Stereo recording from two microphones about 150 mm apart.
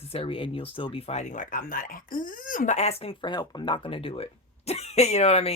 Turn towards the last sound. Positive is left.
turn(degrees=45)  # may be behind; listen again after turning